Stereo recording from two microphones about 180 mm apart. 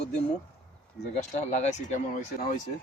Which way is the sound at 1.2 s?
40° left (ahead or behind).